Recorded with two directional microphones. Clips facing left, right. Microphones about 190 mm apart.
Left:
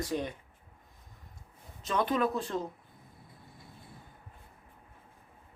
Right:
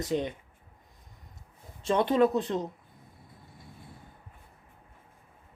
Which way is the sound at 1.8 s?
25° right (ahead or behind).